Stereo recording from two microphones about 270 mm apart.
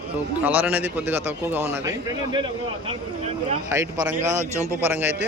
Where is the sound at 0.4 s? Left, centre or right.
Centre.